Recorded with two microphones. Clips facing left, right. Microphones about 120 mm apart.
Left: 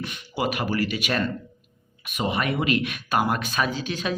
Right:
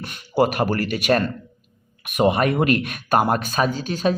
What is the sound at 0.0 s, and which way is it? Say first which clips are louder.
Speech: right 8 dB; 45° right (ahead or behind).